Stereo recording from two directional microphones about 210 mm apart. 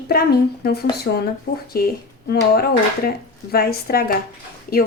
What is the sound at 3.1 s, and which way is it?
Speech, 45° left (ahead or behind).